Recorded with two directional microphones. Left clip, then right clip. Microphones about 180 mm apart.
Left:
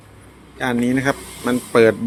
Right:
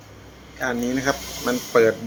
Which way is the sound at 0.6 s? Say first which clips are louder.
Left 4 dB; 50° left (ahead or behind).